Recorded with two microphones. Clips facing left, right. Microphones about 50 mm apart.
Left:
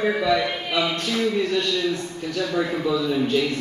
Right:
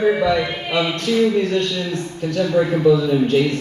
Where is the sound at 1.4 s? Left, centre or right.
Right.